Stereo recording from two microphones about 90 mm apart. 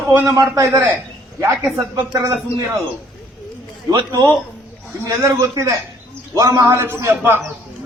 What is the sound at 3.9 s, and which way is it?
Speech, 45° right (ahead or behind).